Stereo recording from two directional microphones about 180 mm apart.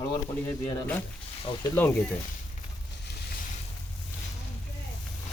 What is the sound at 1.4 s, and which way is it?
Speech, 30° left (ahead or behind).